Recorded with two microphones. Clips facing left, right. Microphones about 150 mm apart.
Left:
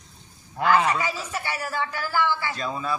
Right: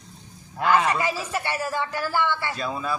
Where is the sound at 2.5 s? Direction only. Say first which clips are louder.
Even; 5° right (ahead or behind).